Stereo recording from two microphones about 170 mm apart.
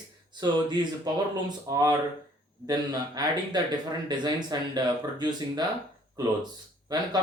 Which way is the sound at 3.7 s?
25° right (ahead or behind).